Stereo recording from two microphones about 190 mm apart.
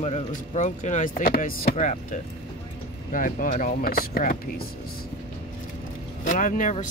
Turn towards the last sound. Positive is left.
turn(degrees=40)  # may be behind; listen again after turning